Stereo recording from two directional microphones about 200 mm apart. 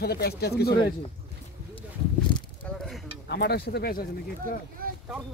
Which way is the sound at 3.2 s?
55° left (ahead or behind).